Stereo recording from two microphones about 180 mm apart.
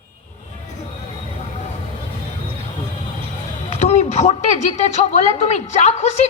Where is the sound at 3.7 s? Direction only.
35° left (ahead or behind).